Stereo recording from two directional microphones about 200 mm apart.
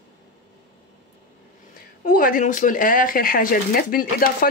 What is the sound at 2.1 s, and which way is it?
Speech, 45° left (ahead or behind).